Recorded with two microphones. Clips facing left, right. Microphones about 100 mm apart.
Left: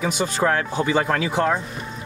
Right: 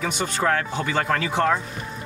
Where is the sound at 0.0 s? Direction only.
15° left (ahead or behind).